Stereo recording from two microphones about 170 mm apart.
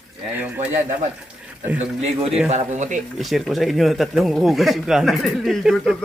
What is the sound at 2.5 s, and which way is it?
Speech, 40° right (ahead or behind).